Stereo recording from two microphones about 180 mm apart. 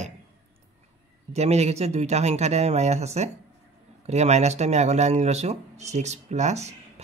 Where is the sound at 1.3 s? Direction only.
35° right (ahead or behind).